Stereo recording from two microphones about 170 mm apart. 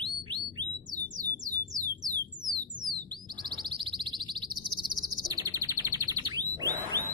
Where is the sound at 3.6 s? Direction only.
30° right (ahead or behind).